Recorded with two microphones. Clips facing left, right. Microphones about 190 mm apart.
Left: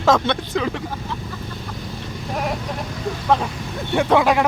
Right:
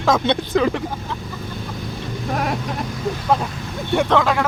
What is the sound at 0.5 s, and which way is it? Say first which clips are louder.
Speech: right 6 dB; 50° right (ahead or behind).